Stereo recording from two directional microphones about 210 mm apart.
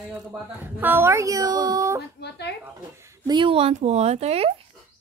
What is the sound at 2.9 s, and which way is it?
Speech, 15° right (ahead or behind).